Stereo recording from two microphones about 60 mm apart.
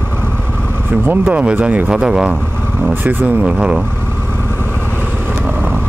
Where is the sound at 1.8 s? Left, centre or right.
Centre.